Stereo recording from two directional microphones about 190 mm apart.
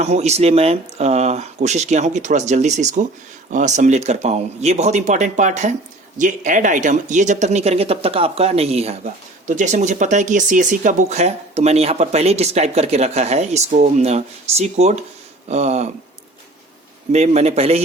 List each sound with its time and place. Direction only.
0.0 s speech: 35° right (ahead or behind)
17.1 s speech: 35° right (ahead or behind)